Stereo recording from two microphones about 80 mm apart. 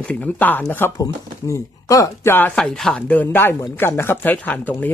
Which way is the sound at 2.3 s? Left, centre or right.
Left.